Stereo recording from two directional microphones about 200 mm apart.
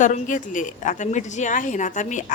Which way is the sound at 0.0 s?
40° left (ahead or behind).